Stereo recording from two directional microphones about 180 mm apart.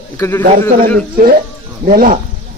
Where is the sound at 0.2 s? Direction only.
10° left (ahead or behind).